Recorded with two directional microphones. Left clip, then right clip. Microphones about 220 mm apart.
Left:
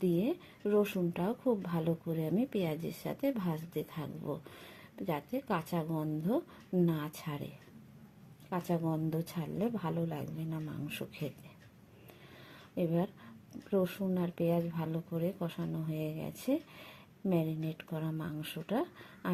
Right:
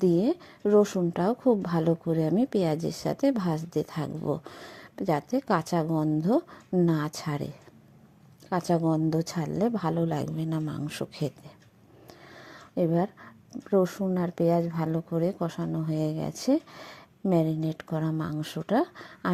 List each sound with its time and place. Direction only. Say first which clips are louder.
0.0 s a woman's voice: right 9 dB; 35° right (ahead or behind)
8.4 s a woman's voice: right 9 dB; 35° right (ahead or behind)
12.5 s a sound: right 8 dB; 35° right (ahead or behind)
13.7 s a woman's voice: right 8 dB; 30° right (ahead or behind)